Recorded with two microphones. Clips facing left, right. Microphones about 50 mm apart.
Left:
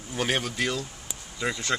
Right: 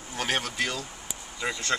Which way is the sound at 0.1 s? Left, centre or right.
Centre.